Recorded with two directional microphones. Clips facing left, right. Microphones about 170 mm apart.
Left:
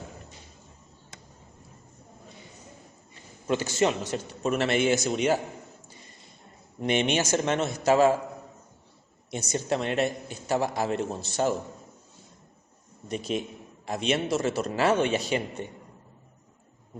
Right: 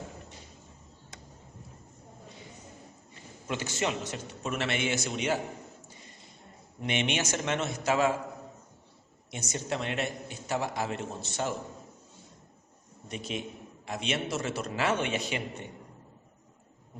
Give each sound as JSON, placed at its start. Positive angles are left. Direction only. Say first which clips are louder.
{"t": 3.4, "sound": "a man's voice", "louder": "left 7 dB", "side_deg": 35}
{"t": 6.8, "sound": "a man's voice", "louder": "left 5 dB", "side_deg": 40}
{"t": 9.3, "sound": "a man's voice", "louder": "left 6 dB", "side_deg": 35}
{"t": 13.1, "sound": "a man's voice", "louder": "left 6 dB", "side_deg": 40}